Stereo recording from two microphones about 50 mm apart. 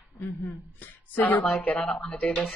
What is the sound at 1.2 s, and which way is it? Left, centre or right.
Speech, left.